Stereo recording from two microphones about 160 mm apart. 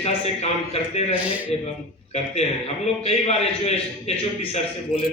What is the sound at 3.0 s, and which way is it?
Speech, 40° left (ahead or behind).